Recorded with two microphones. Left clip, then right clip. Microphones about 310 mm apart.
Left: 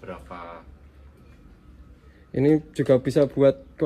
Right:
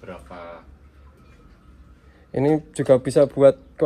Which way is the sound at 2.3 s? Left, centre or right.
Centre.